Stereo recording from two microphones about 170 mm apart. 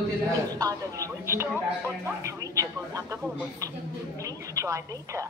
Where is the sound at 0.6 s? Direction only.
20° right (ahead or behind).